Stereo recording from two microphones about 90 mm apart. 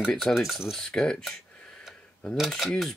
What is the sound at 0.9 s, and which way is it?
Speech, 5° left (ahead or behind).